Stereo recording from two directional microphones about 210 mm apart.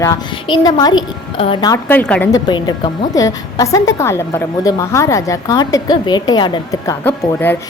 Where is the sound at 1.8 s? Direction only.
10° left (ahead or behind).